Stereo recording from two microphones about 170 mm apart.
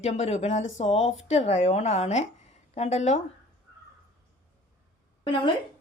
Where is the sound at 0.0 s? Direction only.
40° left (ahead or behind).